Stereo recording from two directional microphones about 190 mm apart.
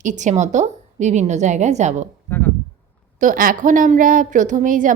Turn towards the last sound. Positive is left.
turn(degrees=-45)  # may be behind; listen again after turning